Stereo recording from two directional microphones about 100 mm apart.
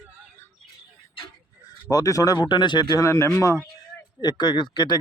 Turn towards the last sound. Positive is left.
turn(degrees=50)  # may be behind; listen again after turning